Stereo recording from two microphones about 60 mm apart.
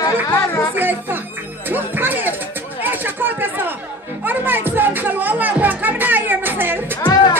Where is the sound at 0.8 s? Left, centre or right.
Right.